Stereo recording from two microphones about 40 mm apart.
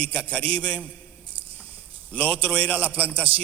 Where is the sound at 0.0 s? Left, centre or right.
Left.